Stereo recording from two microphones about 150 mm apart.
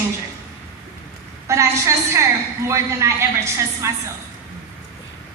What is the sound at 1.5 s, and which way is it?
A woman's voice, 20° right (ahead or behind).